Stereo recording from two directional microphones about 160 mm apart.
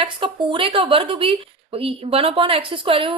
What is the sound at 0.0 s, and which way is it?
A woman's voice, 30° right (ahead or behind).